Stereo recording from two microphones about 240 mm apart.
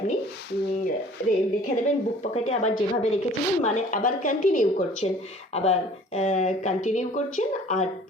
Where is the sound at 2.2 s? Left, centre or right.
Left.